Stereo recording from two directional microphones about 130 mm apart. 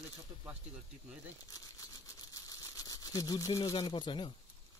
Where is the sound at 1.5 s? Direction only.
25° left (ahead or behind).